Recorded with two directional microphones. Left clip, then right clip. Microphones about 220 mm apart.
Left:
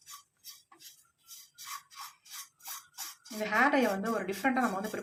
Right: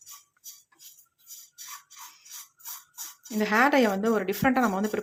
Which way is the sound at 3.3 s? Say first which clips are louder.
Right 5 dB; 50° right (ahead or behind).